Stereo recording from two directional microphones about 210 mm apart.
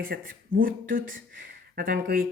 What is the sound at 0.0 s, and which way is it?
Speech, 45° right (ahead or behind).